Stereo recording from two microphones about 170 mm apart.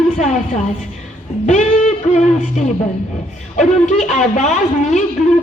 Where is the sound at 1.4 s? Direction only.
45° left (ahead or behind).